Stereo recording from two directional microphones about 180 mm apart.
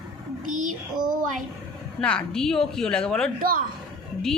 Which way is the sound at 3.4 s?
55° right (ahead or behind).